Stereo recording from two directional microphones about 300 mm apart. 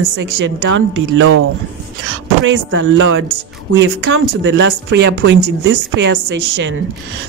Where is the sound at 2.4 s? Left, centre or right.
Right.